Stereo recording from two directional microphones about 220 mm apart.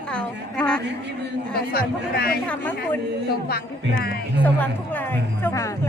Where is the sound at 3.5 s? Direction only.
45° left (ahead or behind).